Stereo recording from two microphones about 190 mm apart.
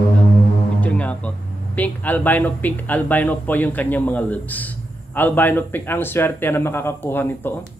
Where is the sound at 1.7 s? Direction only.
10° left (ahead or behind).